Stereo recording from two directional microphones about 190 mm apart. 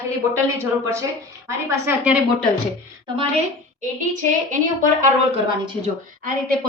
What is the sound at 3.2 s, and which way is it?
A woman's voice, 35° right (ahead or behind).